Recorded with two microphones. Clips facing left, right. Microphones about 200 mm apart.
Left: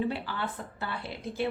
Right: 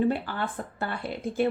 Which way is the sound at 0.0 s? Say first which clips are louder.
Right 5 dB; 50° right (ahead or behind).